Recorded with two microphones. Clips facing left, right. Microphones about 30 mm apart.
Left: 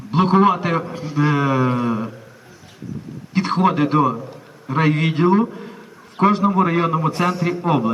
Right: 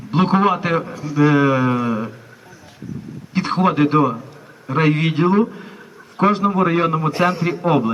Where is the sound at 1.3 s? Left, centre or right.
Centre.